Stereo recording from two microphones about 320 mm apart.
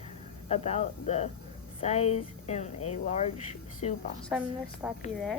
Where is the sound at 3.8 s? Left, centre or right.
Left.